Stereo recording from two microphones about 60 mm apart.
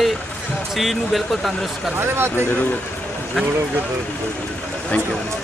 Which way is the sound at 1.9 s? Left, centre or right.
Right.